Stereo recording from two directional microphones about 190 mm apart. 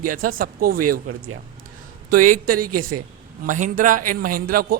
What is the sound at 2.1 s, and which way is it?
Speech, 45° right (ahead or behind).